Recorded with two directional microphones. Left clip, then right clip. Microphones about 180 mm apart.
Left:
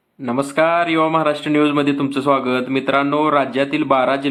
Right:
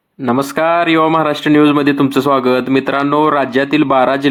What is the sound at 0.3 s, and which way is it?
A man's voice, 30° right (ahead or behind).